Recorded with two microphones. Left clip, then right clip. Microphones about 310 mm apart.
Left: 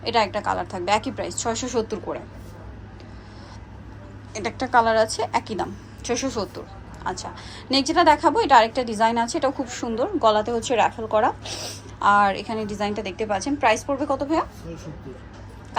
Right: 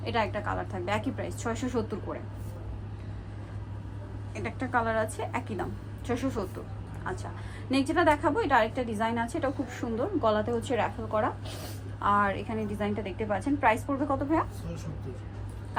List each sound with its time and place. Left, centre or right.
0.0 s a woman's voice: centre
4.4 s a woman's voice: centre
7.7 s a woman's voice: centre